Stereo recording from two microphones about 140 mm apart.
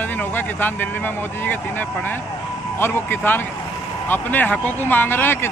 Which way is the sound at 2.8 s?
15° left (ahead or behind).